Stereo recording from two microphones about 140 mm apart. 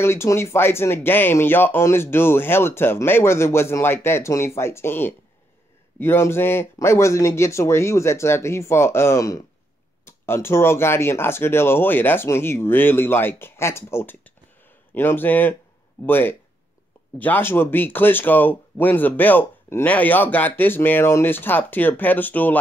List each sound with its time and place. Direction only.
0.0 s speech: 20° left (ahead or behind)